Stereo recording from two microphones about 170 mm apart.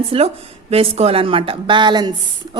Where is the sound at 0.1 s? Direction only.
35° right (ahead or behind).